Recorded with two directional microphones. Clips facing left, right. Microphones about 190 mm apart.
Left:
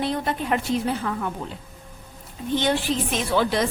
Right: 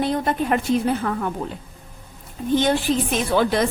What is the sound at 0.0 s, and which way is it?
A woman's voice, 45° right (ahead or behind).